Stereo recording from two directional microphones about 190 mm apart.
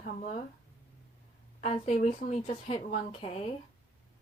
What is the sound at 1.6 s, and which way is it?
A woman's voice, 35° left (ahead or behind).